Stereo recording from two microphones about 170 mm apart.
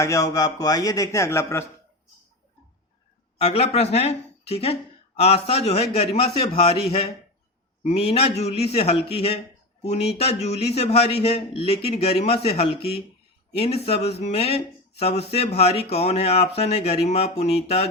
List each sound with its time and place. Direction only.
0.0 s a man's voice: 20° left (ahead or behind)
3.3 s speech: 35° left (ahead or behind)
7.9 s speech: 35° left (ahead or behind)